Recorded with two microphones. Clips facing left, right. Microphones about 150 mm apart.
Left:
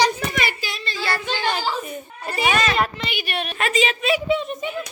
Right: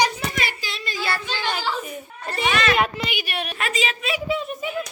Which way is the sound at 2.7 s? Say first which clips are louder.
Right 1 dB; 10° right (ahead or behind).